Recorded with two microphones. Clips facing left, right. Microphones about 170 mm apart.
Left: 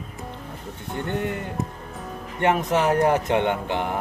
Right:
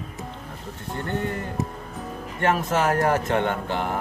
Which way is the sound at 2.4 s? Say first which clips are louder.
Left 1 dB; 15° left (ahead or behind).